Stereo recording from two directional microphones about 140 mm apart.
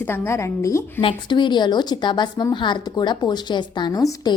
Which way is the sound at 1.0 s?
35° left (ahead or behind).